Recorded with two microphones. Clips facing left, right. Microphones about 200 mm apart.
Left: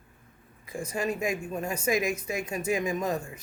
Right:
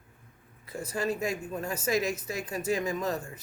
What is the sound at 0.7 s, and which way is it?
Speech, 10° left (ahead or behind).